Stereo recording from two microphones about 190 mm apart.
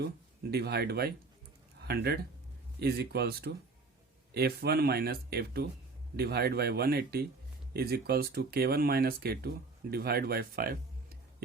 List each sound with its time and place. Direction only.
0.5 s speech: 55° right (ahead or behind)